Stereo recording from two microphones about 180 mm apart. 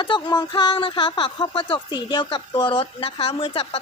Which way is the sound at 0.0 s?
25° left (ahead or behind).